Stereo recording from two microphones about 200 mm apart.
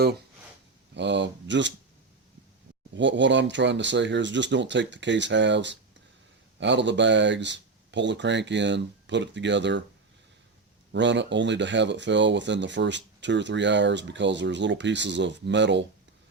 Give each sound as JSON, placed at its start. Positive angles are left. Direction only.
{"t": 0.9, "sound": "speech", "side_deg": -65}
{"t": 2.9, "sound": "speech", "side_deg": -65}
{"t": 10.9, "sound": "speech", "side_deg": -65}